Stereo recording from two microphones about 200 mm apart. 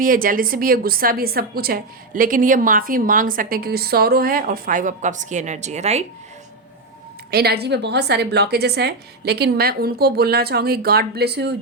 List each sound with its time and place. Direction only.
0.0 s a woman's voice: 45° right (ahead or behind)
7.3 s a woman's voice: 50° right (ahead or behind)